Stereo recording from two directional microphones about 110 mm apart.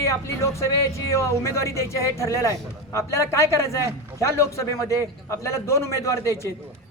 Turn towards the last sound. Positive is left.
turn(degrees=25)  # may be behind; listen again after turning